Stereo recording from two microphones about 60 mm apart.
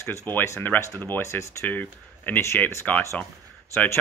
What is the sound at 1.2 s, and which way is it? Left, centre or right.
Speech, left.